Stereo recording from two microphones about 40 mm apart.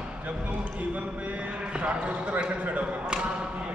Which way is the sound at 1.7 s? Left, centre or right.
Right.